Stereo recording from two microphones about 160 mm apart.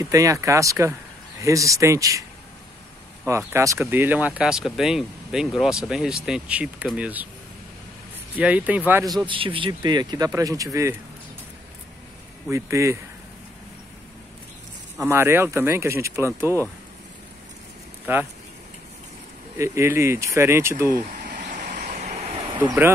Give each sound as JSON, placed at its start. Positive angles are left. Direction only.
{"t": 0.0, "sound": "speech", "side_deg": -20}
{"t": 3.3, "sound": "speech", "side_deg": -15}
{"t": 8.4, "sound": "speech", "side_deg": -10}
{"t": 9.3, "sound": "speech", "side_deg": -30}
{"t": 12.4, "sound": "speech", "side_deg": -20}
{"t": 15.0, "sound": "speech", "side_deg": -15}
{"t": 18.1, "sound": "speech", "side_deg": -15}
{"t": 19.6, "sound": "speech", "side_deg": -15}
{"t": 20.9, "sound": "a sound", "side_deg": -60}